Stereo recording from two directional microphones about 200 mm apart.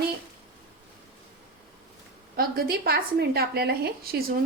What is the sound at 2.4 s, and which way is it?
A woman's voice, 50° right (ahead or behind).